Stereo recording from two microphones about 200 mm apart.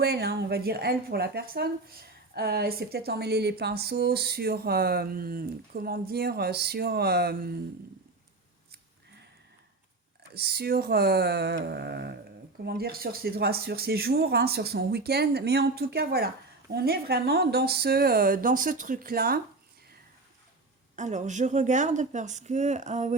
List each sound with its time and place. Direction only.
0.0 s speech: 55° right (ahead or behind)
10.3 s speech: 50° right (ahead or behind)
20.9 s speech: 35° right (ahead or behind)